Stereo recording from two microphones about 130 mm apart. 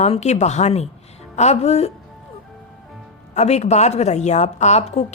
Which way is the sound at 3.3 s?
55° left (ahead or behind).